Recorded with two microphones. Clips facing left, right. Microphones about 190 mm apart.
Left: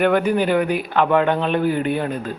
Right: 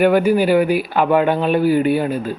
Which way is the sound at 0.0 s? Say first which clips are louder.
Right 3 dB; 5° right (ahead or behind).